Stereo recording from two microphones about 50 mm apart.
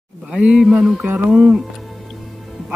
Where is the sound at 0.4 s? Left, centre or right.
Centre.